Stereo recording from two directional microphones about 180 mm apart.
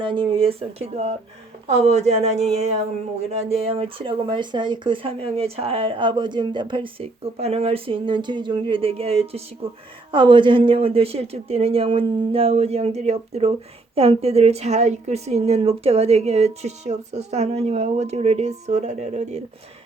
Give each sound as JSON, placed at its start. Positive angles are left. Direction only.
{"t": 0.0, "sound": "a woman's voice", "side_deg": -30}